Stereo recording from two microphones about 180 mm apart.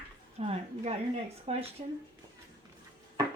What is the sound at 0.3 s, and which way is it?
A woman's voice, 35° right (ahead or behind).